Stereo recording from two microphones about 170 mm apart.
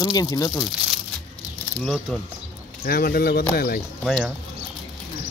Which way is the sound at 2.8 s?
60° left (ahead or behind).